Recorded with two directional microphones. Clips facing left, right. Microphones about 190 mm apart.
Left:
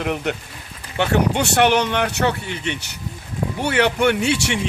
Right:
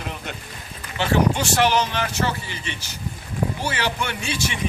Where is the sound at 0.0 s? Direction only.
70° left (ahead or behind).